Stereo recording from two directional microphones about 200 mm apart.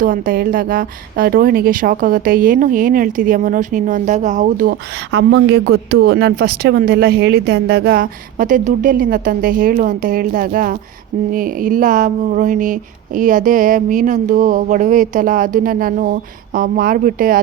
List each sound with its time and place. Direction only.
0.0 s a woman's voice: 45° right (ahead or behind)
11.3 s a sound: 45° right (ahead or behind)
16.6 s a woman's voice: 45° right (ahead or behind)